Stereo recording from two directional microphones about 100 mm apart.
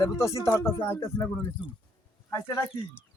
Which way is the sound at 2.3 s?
30° left (ahead or behind).